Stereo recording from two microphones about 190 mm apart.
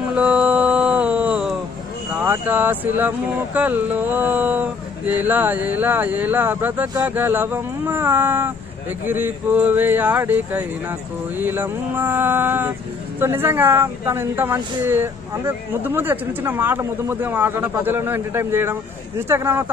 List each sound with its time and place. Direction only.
0.1 s music: 5° right (ahead or behind)
2.1 s speech: 10° right (ahead or behind)